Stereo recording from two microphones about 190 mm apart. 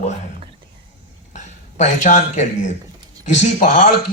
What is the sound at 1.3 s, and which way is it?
Speech, 40° left (ahead or behind).